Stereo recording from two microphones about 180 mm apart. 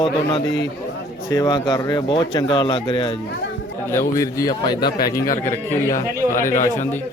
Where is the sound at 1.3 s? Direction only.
20° left (ahead or behind).